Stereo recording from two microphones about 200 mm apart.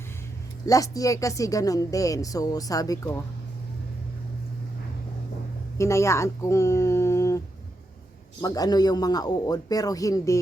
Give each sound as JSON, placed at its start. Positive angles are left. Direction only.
{"t": 0.6, "sound": "speech", "side_deg": 15}
{"t": 5.7, "sound": "a man's voice", "side_deg": 15}